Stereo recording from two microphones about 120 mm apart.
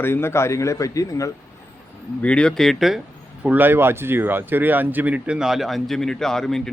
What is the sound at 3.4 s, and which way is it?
Speech, 15° right (ahead or behind).